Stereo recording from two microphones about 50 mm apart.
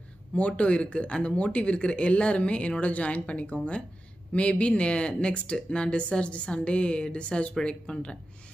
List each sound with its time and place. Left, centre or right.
0.4 s speech: left